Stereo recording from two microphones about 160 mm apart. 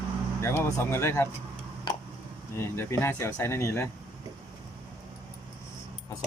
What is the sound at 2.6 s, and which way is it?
Speech, 15° left (ahead or behind).